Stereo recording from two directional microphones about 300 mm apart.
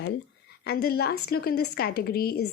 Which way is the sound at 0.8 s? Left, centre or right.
Left.